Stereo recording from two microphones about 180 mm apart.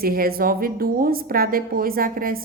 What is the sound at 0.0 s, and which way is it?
A woman's voice, 55° right (ahead or behind).